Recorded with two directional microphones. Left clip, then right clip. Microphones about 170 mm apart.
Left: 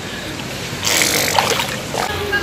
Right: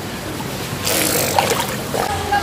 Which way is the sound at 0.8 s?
Centre (ahead or behind).